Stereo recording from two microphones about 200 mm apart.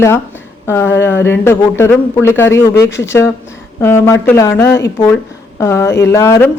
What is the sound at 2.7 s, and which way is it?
Speech, 60° left (ahead or behind).